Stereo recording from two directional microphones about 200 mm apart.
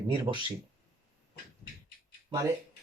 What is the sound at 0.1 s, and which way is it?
Speech, 25° right (ahead or behind).